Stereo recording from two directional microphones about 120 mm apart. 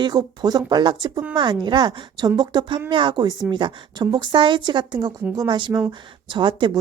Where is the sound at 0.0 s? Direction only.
35° right (ahead or behind).